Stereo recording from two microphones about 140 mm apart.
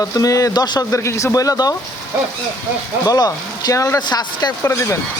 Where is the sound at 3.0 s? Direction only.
25° left (ahead or behind).